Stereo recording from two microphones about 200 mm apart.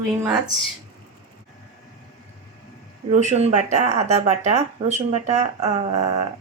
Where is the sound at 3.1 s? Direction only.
35° right (ahead or behind).